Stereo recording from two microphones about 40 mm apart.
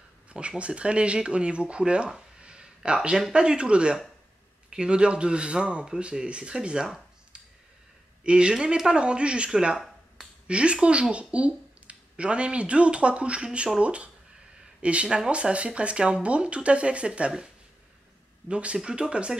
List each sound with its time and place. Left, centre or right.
0.3 s speech: right
2.4 s a sound: right
3.3 s speech: right
8.2 s speech: right
15.0 s speech: centre
15.5 s speech: right
18.5 s speech: right